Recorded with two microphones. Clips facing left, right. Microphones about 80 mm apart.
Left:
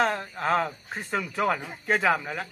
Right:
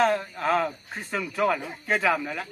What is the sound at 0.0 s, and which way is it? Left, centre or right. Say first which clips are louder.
Speech: right 3 dB; left.